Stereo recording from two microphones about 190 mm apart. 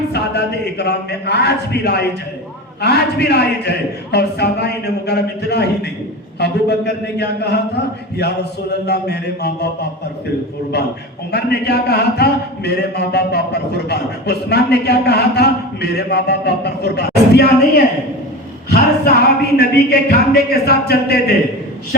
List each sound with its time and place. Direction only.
0.1 s a man's voice: 60° left (ahead or behind)
11.3 s a man's voice: 60° left (ahead or behind)
18.7 s a man's voice: 55° left (ahead or behind)